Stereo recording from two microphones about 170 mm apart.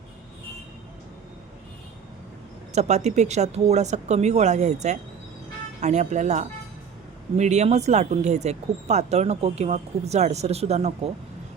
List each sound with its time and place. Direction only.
2.7 s speech: 40° right (ahead or behind)